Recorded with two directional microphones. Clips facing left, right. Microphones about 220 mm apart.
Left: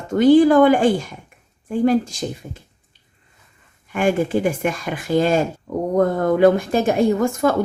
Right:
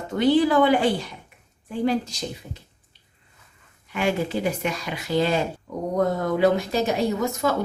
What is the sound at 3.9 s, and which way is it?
Speech, 50° left (ahead or behind).